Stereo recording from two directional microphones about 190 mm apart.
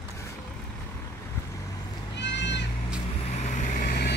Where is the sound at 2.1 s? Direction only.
65° left (ahead or behind).